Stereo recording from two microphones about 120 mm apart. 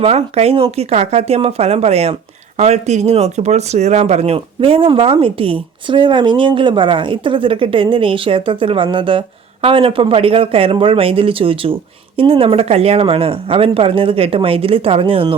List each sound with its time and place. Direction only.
0.0 s speech: 60° right (ahead or behind)